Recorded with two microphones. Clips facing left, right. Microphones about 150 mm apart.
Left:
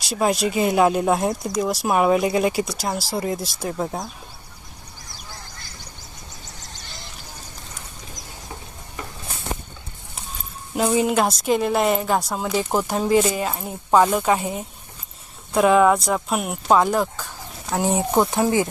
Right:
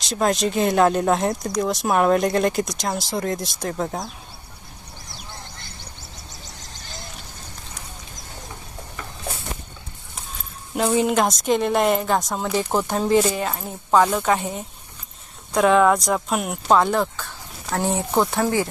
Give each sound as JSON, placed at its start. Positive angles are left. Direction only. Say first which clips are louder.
{"t": 0.0, "sound": "speech", "louder": "even", "side_deg": 10}
{"t": 4.9, "sound": "a sound", "louder": "right 2 dB", "side_deg": -25}
{"t": 10.8, "sound": "speech", "louder": "even", "side_deg": 5}